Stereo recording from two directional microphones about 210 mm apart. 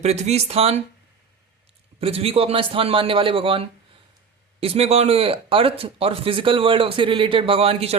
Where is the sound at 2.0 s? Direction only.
30° right (ahead or behind).